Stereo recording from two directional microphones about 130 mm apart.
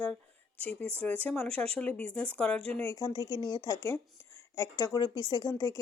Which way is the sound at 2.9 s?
30° left (ahead or behind).